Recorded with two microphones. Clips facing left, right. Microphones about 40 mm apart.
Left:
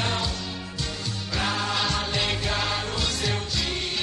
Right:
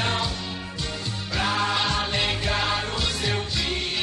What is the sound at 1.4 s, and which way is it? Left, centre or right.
Music, centre.